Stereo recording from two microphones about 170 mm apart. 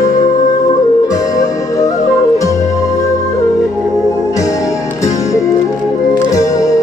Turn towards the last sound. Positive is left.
turn(degrees=20)  # may be behind; listen again after turning